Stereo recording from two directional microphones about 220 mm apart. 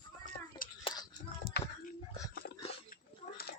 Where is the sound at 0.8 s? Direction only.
20° left (ahead or behind).